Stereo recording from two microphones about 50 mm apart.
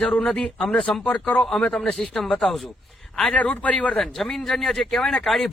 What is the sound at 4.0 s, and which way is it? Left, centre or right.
A man's voice, centre.